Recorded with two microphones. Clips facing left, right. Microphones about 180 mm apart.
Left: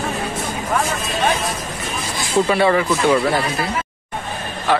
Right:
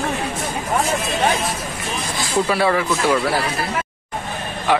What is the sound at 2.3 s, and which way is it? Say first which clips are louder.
Speech: left 3 dB; centre (ahead or behind).